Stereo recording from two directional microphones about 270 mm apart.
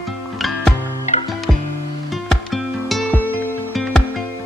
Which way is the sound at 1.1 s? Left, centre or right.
Left.